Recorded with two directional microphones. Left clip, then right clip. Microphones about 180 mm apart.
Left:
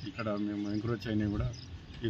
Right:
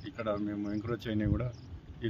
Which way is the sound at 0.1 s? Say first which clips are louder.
Right 1 dB; 15° right (ahead or behind).